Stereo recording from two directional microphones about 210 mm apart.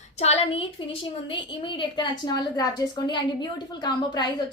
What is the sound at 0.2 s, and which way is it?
A woman's voice, 30° left (ahead or behind).